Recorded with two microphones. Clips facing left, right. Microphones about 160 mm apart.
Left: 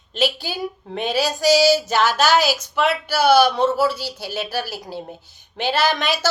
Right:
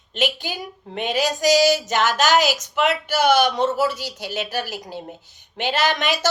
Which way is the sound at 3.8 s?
15° right (ahead or behind).